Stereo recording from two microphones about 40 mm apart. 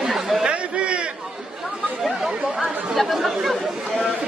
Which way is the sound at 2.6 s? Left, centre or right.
Centre.